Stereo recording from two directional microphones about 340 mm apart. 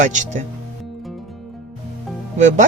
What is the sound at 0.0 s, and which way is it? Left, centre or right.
Speech, right.